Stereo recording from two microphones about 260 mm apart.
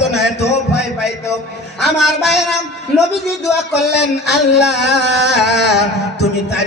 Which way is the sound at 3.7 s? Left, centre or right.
Left.